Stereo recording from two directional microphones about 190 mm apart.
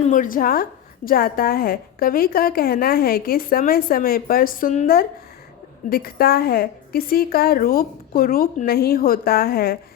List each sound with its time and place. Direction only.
0.0 s a woman's voice: 45° left (ahead or behind)